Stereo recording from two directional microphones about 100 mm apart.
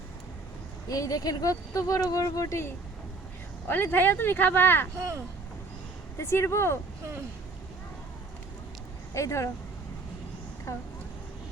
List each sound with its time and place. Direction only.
0.9 s speech: 40° left (ahead or behind); by 4.9 s 20° left (ahead or behind)
4.9 s speech: 30° right (ahead or behind)
6.1 s speech: 30° left (ahead or behind)
9.1 s speech: 30° left (ahead or behind)